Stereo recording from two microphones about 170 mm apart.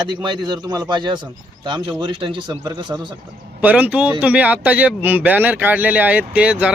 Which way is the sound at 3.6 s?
10° right (ahead or behind).